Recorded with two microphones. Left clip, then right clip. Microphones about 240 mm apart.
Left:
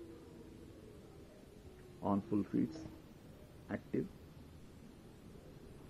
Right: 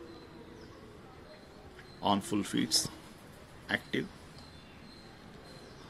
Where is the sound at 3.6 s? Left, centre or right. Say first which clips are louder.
Right 8 dB; centre.